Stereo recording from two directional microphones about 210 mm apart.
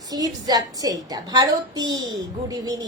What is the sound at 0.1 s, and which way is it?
A woman's voice, 20° right (ahead or behind).